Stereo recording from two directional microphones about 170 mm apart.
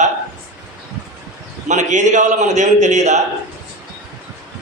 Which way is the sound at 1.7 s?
45° right (ahead or behind).